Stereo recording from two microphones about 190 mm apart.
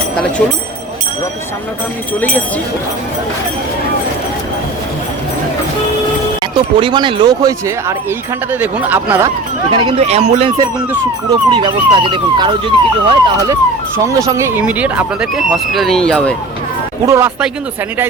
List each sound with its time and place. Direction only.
6.4 s speech: 25° right (ahead or behind)
8.5 s speech: 10° right (ahead or behind)
9.7 s speech: 30° right (ahead or behind); by 16.3 s 5° left (ahead or behind)
17.1 s speech: 15° right (ahead or behind)